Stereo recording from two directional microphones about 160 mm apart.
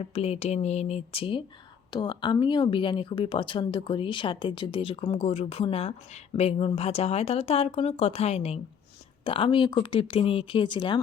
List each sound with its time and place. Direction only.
0.0 s speech: 40° left (ahead or behind)